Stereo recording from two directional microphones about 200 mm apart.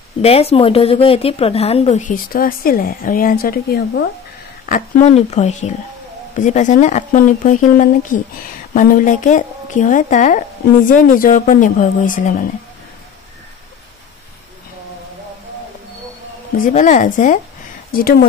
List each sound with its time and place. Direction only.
0.2 s speech: 30° left (ahead or behind); by 4.1 s 55° left (ahead or behind)
4.6 s speech: 40° left (ahead or behind)
16.5 s speech: 40° left (ahead or behind)